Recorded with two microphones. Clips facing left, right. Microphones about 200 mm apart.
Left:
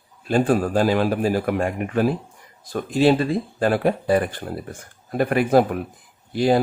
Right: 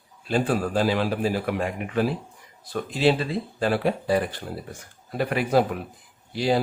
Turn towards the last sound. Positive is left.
turn(degrees=50)  # may be behind; listen again after turning